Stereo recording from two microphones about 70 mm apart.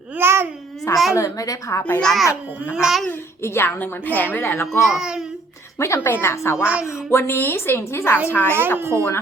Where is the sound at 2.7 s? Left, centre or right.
Centre.